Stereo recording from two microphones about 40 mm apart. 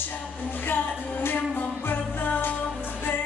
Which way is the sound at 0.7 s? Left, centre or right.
Left.